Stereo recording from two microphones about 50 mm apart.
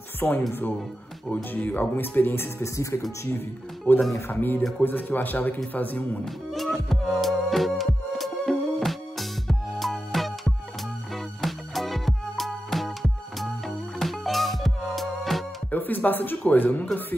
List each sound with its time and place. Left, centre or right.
0.2 s speech: left
2.0 s speech: left
2.4 s speech: left
3.9 s speech: left
6.5 s music: centre
15.7 s speech: left